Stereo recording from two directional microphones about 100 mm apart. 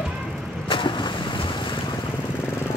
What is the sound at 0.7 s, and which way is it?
Vehicle, 55° left (ahead or behind).